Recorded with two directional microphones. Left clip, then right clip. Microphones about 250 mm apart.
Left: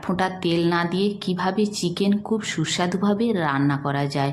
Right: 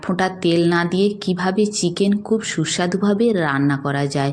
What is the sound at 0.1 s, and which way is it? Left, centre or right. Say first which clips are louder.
A woman's voice: right 4 dB; centre.